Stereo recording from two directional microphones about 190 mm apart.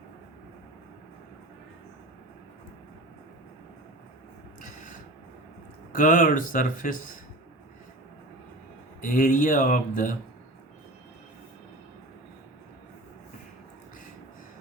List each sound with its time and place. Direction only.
4.6 s a sound: 45° left (ahead or behind)
5.9 s speech: 45° left (ahead or behind)
9.0 s speech: 45° left (ahead or behind)